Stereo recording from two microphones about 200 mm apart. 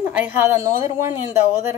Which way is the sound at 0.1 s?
10° right (ahead or behind).